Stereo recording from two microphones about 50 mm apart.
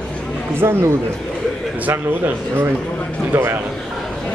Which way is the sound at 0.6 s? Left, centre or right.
Right.